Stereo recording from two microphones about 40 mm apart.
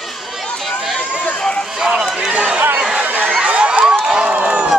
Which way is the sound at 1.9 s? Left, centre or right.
Right.